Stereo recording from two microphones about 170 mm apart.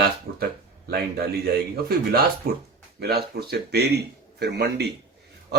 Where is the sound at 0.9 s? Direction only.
65° right (ahead or behind).